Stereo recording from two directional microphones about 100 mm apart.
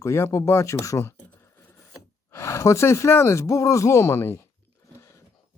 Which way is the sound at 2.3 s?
30° left (ahead or behind).